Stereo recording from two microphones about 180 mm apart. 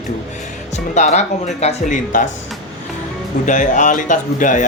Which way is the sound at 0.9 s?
40° left (ahead or behind).